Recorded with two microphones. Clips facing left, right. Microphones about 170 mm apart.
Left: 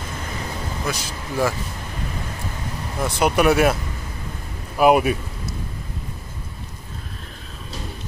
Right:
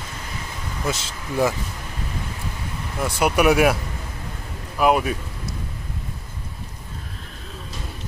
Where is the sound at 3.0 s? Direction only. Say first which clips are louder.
Left 1 dB; 10° right (ahead or behind).